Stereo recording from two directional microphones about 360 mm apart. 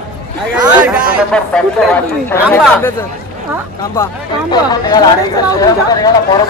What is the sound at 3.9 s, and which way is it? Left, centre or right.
Speech, centre.